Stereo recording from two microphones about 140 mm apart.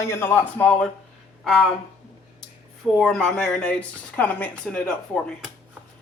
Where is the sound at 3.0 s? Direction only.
5° left (ahead or behind).